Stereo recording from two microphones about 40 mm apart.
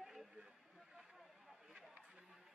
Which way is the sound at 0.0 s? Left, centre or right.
Centre.